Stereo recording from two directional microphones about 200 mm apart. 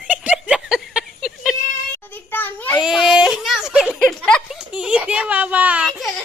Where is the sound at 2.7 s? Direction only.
Centre (ahead or behind).